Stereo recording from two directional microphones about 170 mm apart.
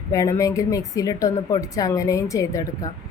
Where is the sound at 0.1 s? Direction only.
20° left (ahead or behind).